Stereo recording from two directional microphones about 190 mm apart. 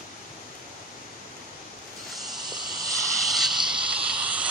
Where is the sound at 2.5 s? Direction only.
20° right (ahead or behind).